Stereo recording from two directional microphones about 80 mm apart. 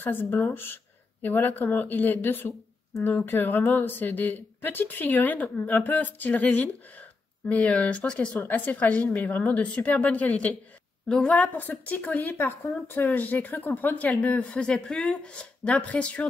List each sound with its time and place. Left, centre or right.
0.0 s speech: left